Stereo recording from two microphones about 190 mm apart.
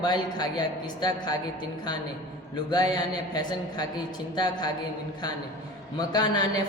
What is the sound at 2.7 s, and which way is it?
Speech, 20° left (ahead or behind).